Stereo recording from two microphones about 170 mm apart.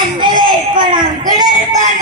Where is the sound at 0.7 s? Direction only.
25° right (ahead or behind).